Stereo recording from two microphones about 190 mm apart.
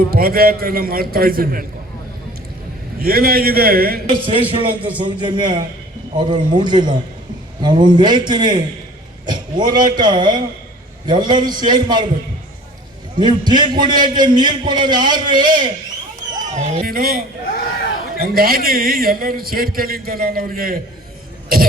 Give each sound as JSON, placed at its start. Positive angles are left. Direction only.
{"t": 0.1, "sound": "a man's voice", "side_deg": -50}
{"t": 3.0, "sound": "a man's voice", "side_deg": -50}
{"t": 4.1, "sound": "a man's voice", "side_deg": -25}
{"t": 13.1, "sound": "a man's voice", "side_deg": -25}
{"t": 16.4, "sound": "a man's voice", "side_deg": -40}